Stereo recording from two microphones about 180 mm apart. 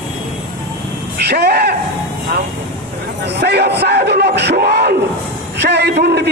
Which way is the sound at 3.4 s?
65° right (ahead or behind).